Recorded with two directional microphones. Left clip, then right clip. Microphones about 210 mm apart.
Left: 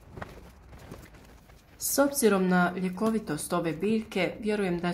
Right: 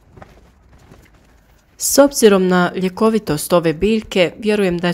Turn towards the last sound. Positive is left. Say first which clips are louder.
# right 13 dB
turn(degrees=-40)  # may be behind; listen again after turning